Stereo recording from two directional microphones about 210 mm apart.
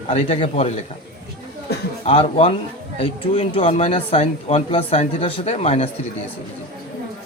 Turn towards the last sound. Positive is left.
turn(degrees=30)  # may be behind; listen again after turning